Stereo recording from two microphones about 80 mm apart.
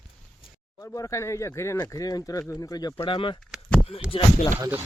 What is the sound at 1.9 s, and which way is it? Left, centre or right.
Speech, left.